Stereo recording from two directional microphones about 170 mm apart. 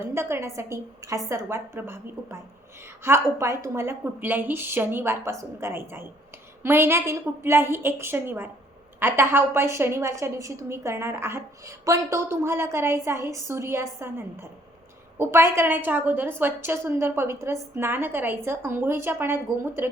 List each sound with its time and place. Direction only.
0.1 s a woman's voice: 15° right (ahead or behind)